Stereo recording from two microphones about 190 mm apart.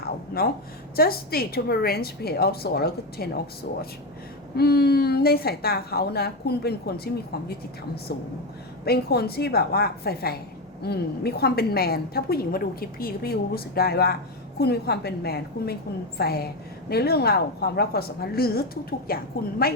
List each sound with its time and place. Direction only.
0.0 s a sound: 50° left (ahead or behind)
0.9 s a woman's voice: 55° left (ahead or behind)
8.8 s a woman's voice: 55° left (ahead or behind)